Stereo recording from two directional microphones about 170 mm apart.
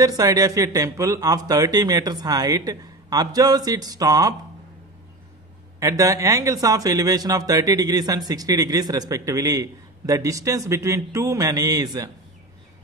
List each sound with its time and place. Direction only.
0.0 s speech: 20° right (ahead or behind)
5.8 s speech: 20° right (ahead or behind)